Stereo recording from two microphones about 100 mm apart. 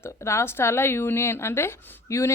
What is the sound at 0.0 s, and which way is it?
A woman's voice, 25° left (ahead or behind).